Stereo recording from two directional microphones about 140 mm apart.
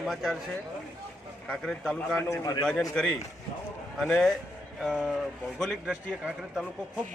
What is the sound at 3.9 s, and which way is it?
A man's voice, centre (ahead or behind).